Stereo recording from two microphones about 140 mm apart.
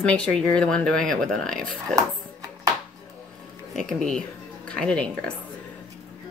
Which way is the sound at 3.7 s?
5° left (ahead or behind).